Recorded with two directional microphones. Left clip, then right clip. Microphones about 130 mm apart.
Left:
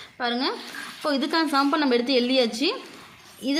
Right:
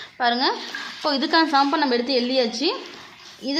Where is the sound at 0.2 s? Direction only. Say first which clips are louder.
Right 5 dB; 35° left (ahead or behind).